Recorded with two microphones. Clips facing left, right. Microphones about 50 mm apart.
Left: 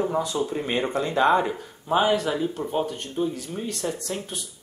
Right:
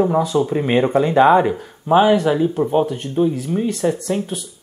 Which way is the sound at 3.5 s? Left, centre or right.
Right.